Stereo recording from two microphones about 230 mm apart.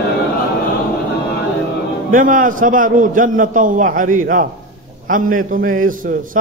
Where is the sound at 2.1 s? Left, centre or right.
Right.